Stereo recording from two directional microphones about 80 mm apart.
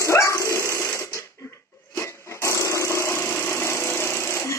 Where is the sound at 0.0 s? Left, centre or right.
Left.